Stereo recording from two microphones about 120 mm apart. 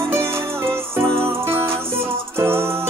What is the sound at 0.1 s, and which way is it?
Music, 20° right (ahead or behind).